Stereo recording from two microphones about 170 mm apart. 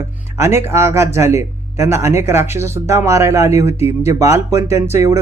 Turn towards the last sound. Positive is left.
turn(degrees=-15)  # may be behind; listen again after turning